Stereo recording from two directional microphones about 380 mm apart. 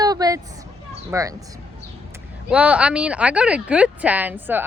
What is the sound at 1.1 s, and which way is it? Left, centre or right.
Speech, centre.